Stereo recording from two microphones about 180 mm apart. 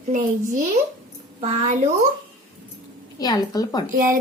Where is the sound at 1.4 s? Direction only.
35° right (ahead or behind).